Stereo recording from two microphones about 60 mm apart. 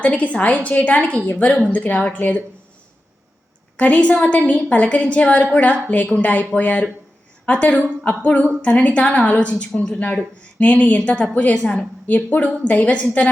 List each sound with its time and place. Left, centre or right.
0.0 s a woman's voice: left
3.8 s a woman's voice: left
12.0 s a woman's voice: left